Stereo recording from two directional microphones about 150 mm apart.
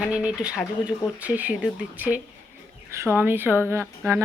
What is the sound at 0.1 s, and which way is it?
Speech, 5° right (ahead or behind).